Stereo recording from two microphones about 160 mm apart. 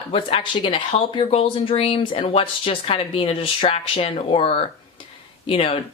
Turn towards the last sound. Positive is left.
turn(degrees=35)  # may be behind; listen again after turning